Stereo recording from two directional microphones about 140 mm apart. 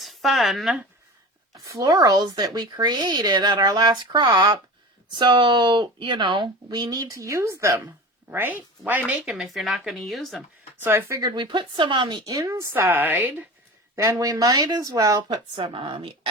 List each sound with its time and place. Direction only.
0.0 s speech: centre (ahead or behind)
1.5 s speech: 25° right (ahead or behind)
9.3 s speech: centre (ahead or behind)
10.8 s speech: 20° right (ahead or behind)
13.9 s speech: 20° right (ahead or behind)
15.5 s speech: 40° right (ahead or behind)